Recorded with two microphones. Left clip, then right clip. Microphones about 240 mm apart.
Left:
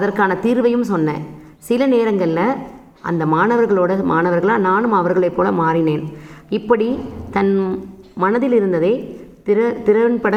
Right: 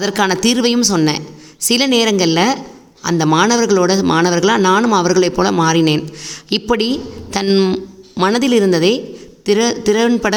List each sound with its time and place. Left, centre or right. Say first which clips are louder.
0.0 s speech: right 1 dB; right